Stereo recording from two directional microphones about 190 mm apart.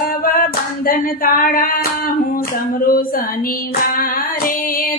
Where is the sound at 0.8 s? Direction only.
45° left (ahead or behind).